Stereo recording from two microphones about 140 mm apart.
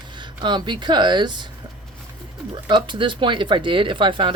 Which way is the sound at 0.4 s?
30° right (ahead or behind).